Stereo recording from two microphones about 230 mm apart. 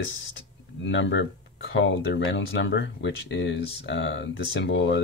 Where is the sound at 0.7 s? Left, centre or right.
Left.